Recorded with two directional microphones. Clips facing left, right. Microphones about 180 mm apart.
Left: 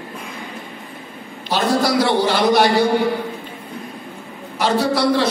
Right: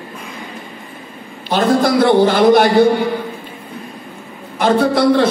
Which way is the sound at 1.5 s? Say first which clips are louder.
Right 4 dB; 50° right (ahead or behind).